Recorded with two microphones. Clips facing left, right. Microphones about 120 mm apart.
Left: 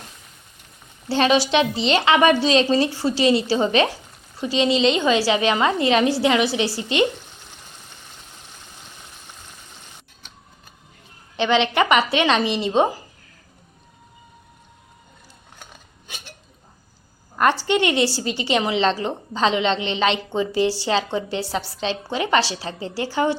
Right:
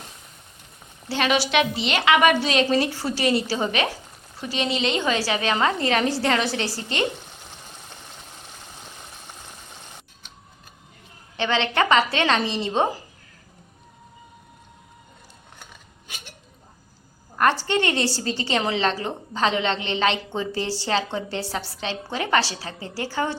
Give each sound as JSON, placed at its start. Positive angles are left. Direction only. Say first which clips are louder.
{"t": 1.1, "sound": "a woman's voice", "louder": "left 4 dB", "side_deg": 30}
{"t": 11.3, "sound": "a woman's voice", "louder": "left 4 dB", "side_deg": 20}
{"t": 17.3, "sound": "a woman's voice", "louder": "left 2 dB", "side_deg": 20}